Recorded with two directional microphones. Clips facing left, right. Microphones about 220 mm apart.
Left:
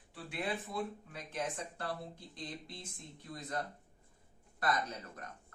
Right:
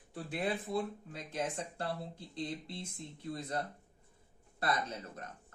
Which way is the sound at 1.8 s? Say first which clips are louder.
Right 2 dB; 25° right (ahead or behind).